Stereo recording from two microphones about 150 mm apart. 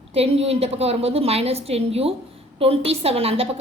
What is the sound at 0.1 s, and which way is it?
A woman's voice, 40° right (ahead or behind).